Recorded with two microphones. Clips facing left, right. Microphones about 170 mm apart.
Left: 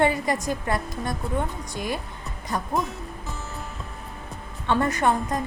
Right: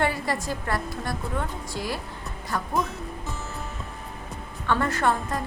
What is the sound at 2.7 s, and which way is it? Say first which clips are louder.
Music: even; centre (ahead or behind).